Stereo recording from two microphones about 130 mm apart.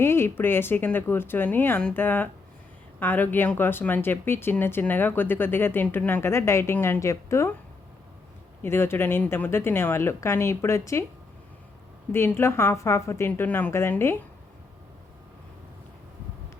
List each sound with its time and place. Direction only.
0.0 s speech: 20° left (ahead or behind)
8.6 s speech: 20° left (ahead or behind)
12.1 s speech: 20° left (ahead or behind)